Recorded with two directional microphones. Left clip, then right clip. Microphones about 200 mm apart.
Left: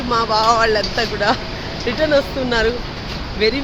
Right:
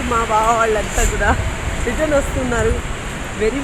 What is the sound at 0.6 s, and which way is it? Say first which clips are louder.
Speech: left 1 dB; 20° left (ahead or behind).